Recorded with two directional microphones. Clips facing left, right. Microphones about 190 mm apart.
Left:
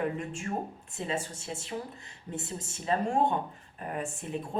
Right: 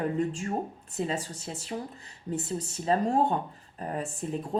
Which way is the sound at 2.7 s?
35° right (ahead or behind).